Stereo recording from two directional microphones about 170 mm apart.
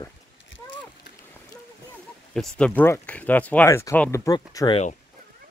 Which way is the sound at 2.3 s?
5° left (ahead or behind).